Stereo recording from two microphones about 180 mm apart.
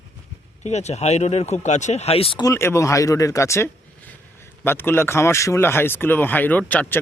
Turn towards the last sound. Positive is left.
turn(degrees=10)  # may be behind; listen again after turning